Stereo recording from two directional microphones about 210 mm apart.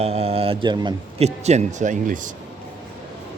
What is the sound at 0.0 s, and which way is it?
A man's voice, 30° right (ahead or behind).